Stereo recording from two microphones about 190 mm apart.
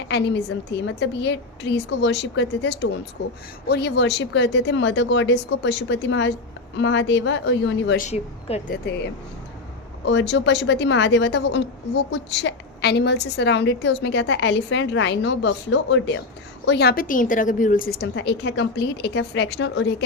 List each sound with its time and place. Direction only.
0.1 s a woman's voice: 65° left (ahead or behind)
7.9 s speech: 35° left (ahead or behind)
10.1 s a woman's voice: 70° left (ahead or behind)
16.6 s a woman's voice: 60° left (ahead or behind)